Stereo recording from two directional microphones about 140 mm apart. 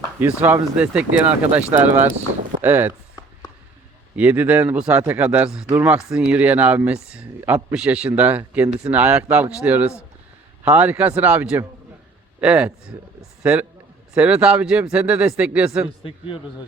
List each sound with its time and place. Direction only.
0.2 s speech: 15° right (ahead or behind)
4.1 s a man's voice: 10° right (ahead or behind)
16.0 s a man's voice: 40° left (ahead or behind)